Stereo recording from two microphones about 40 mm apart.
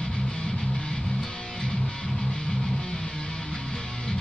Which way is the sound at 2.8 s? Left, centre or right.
Centre.